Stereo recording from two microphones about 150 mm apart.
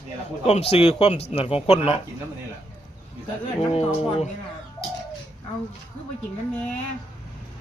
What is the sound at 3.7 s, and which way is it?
Speech, 40° left (ahead or behind).